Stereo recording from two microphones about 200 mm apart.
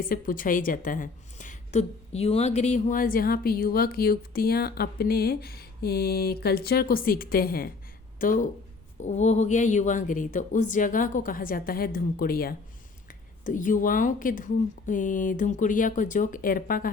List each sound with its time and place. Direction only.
0.0 s a woman's voice: 45° left (ahead or behind)